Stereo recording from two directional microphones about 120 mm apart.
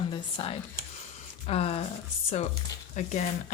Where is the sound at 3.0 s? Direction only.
90° left.